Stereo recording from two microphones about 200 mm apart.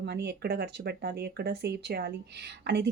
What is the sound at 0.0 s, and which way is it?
Speech, 55° right (ahead or behind).